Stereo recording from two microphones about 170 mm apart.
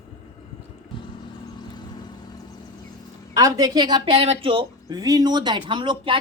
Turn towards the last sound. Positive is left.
turn(degrees=-30)  # may be behind; listen again after turning